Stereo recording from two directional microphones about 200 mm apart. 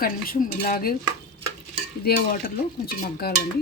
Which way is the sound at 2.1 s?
50° left (ahead or behind).